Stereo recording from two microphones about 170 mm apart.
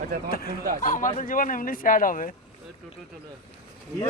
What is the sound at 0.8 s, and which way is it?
Speech, 50° left (ahead or behind).